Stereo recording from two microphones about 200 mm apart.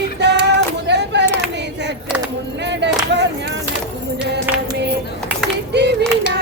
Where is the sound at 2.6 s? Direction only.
60° right (ahead or behind).